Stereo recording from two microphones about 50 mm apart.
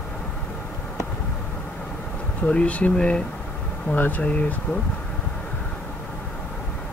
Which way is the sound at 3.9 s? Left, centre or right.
Left.